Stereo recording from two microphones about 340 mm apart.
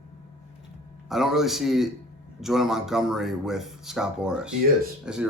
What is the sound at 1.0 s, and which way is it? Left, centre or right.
Speech, centre.